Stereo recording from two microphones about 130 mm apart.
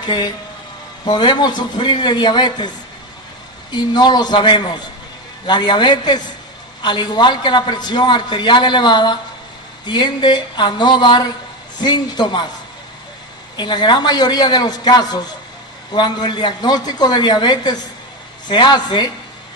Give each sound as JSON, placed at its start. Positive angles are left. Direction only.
{"t": 0.0, "sound": "a man's voice", "side_deg": 35}
{"t": 3.7, "sound": "a man's voice", "side_deg": 35}
{"t": 13.6, "sound": "a man's voice", "side_deg": 35}